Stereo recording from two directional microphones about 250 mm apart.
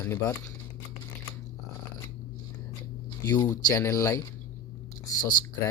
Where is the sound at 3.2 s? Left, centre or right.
Centre.